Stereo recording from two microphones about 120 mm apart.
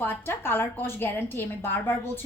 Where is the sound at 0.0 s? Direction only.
15° left (ahead or behind).